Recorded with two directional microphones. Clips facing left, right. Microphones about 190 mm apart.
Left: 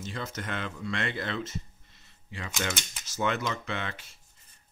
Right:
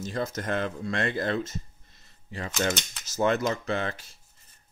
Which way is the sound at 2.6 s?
40° right (ahead or behind).